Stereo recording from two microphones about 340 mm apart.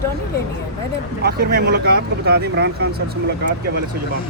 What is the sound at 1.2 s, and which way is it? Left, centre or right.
Speech, right.